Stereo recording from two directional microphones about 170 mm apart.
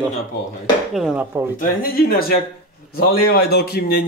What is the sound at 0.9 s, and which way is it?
Speech, 5° right (ahead or behind).